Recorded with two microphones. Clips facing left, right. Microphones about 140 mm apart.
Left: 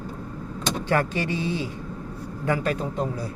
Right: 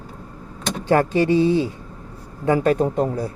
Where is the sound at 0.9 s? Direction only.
30° right (ahead or behind).